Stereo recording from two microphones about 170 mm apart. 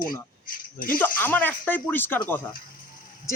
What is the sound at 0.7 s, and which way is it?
Speech, 55° left (ahead or behind).